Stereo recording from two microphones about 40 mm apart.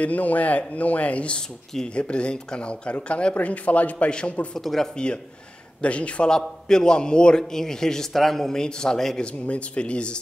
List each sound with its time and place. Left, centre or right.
0.0 s speech: left
3.3 s speech: left
4.6 s a man's voice: centre
4.9 s speech: left
6.7 s a man's voice: centre
9.2 s speech: left